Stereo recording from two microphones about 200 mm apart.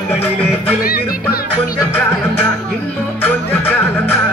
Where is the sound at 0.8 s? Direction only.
50° left (ahead or behind).